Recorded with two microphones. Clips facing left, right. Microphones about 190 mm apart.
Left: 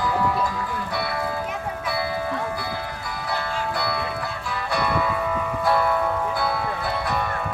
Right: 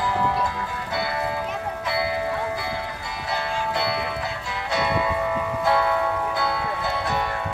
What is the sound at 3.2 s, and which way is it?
Music, 20° right (ahead or behind).